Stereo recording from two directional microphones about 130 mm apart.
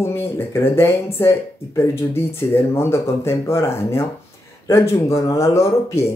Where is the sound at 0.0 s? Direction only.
20° left (ahead or behind).